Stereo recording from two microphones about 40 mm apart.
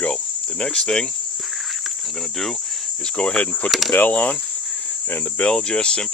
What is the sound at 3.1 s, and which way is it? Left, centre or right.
Speech, left.